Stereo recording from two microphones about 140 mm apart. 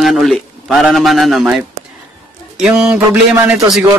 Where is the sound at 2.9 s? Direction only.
20° right (ahead or behind).